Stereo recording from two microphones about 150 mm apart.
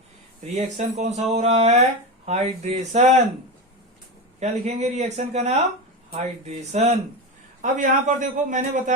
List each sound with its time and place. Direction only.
0.5 s speech: 50° right (ahead or behind)
4.4 s a man's voice: 50° right (ahead or behind)